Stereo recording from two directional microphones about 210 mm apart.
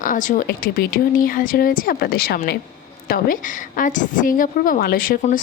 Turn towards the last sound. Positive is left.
turn(degrees=40)  # may be behind; listen again after turning